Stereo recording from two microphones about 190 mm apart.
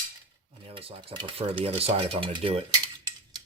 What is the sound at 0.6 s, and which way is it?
Cutlery, 30° right (ahead or behind).